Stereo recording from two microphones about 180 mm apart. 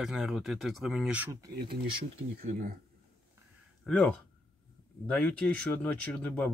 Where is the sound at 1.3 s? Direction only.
25° right (ahead or behind).